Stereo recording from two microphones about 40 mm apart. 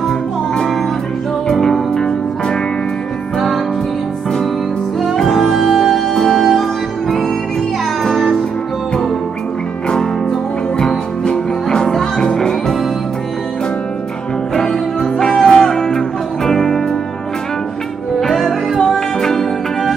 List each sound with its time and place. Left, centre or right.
1.5 s music: centre
5.0 s music: centre
8.0 s music: centre
10.8 s music: centre
14.5 s music: centre
18.2 s music: centre